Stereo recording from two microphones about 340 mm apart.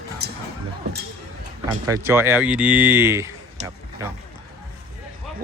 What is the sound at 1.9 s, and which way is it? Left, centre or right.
Speech, centre.